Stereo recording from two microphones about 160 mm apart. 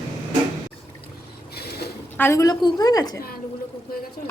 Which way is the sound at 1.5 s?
80° left.